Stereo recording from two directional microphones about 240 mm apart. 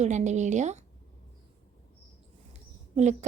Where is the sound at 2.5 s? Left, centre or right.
Right.